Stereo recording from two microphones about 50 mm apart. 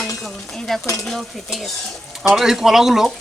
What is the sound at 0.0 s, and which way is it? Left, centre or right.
Stir, centre.